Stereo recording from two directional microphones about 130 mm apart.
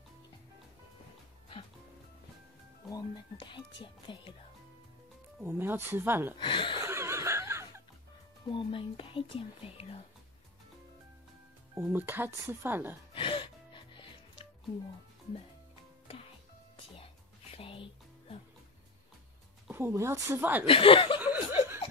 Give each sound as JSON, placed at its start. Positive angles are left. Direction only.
{"t": 3.3, "sound": "speech", "side_deg": 40}
{"t": 5.4, "sound": "speech", "side_deg": -15}
{"t": 6.3, "sound": "speech", "side_deg": 40}
{"t": 6.8, "sound": "a sound", "side_deg": -20}
{"t": 8.5, "sound": "speech", "side_deg": 40}
{"t": 11.7, "sound": "speech", "side_deg": -15}
{"t": 13.1, "sound": "music", "side_deg": 40}
{"t": 17.6, "sound": "music", "side_deg": 45}
{"t": 19.7, "sound": "speech", "side_deg": -20}
{"t": 20.6, "sound": "speech", "side_deg": 45}
{"t": 21.2, "sound": "chuckle", "side_deg": -15}